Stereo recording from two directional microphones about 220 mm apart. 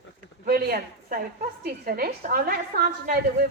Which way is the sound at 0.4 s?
45° right (ahead or behind).